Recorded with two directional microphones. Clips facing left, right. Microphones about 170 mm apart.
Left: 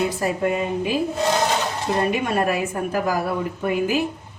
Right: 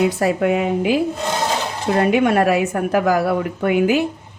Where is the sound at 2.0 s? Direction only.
70° right (ahead or behind).